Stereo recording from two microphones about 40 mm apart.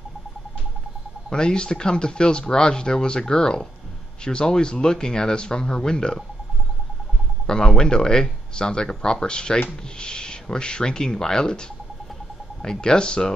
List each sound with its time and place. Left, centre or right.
1.3 s speech: centre
7.4 s speech: centre
12.6 s speech: left